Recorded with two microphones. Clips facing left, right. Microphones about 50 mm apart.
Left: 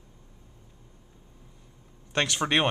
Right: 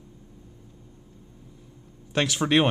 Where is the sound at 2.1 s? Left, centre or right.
Centre.